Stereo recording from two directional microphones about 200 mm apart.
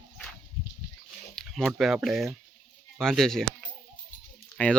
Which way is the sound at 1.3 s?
5° left (ahead or behind).